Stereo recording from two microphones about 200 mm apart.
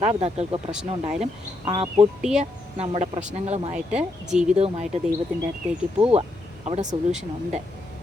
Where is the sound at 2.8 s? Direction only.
30° right (ahead or behind).